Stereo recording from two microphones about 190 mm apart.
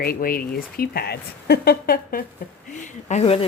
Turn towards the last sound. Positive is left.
turn(degrees=30)  # may be behind; listen again after turning